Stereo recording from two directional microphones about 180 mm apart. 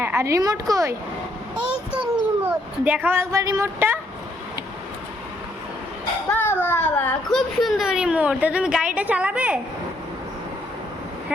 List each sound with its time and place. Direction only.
0.0 s speech: 15° right (ahead or behind)
2.4 s speech: 10° right (ahead or behind)
6.3 s a sound: 10° left (ahead or behind)
7.3 s speech: centre (ahead or behind)